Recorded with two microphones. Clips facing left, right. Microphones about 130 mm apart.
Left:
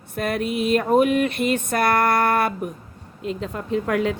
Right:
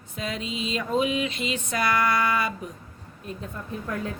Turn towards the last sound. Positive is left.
turn(degrees=85)